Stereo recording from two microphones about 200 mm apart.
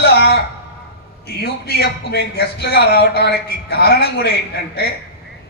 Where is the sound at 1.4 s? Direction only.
55° left (ahead or behind).